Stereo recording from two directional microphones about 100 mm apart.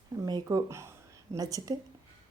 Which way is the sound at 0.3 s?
40° right (ahead or behind).